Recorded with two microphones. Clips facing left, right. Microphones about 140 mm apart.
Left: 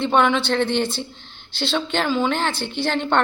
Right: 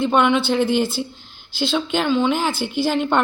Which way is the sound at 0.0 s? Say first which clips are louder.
Right 1 dB; centre (ahead or behind).